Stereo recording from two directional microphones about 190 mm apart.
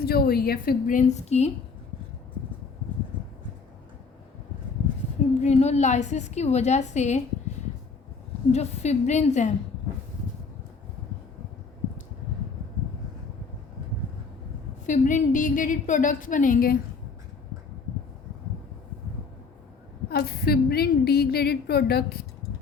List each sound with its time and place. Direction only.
0.0 s a woman's voice: 55° left (ahead or behind); by 1.5 s 35° left (ahead or behind)
5.4 s a woman's voice: 35° left (ahead or behind)
8.5 s a woman's voice: 35° left (ahead or behind)
14.8 s a woman's voice: 40° left (ahead or behind)
20.1 s a woman's voice: 55° left (ahead or behind)